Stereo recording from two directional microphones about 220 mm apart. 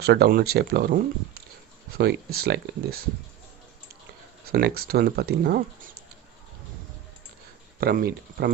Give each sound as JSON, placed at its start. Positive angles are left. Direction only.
{"t": 0.0, "sound": "speech", "side_deg": -45}
{"t": 4.5, "sound": "speech", "side_deg": -45}
{"t": 7.8, "sound": "speech", "side_deg": -45}